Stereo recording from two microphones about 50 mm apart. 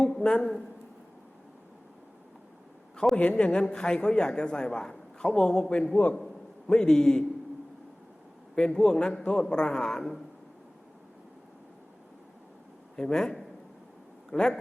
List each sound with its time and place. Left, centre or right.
0.0 s a sound: centre
3.2 s a woman's voice: left
6.7 s a man's voice: centre
8.5 s a man's voice: centre
13.0 s a man's voice: centre